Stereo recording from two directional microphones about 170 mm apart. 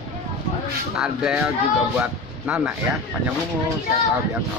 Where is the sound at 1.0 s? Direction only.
5° right (ahead or behind).